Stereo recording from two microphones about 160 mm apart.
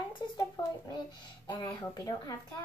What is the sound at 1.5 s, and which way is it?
Speech, 25° left (ahead or behind).